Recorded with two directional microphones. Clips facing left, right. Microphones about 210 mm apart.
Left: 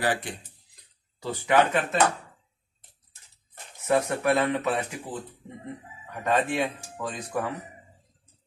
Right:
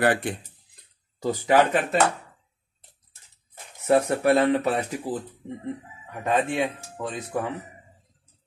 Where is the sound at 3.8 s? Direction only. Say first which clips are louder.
Right 4 dB; 30° right (ahead or behind).